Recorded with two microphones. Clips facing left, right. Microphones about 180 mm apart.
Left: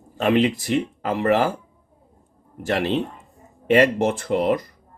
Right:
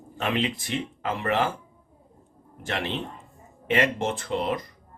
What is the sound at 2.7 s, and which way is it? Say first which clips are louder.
Speech: left 8 dB; 40° left (ahead or behind).